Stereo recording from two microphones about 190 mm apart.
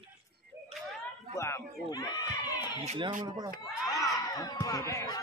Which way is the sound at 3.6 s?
20° left (ahead or behind).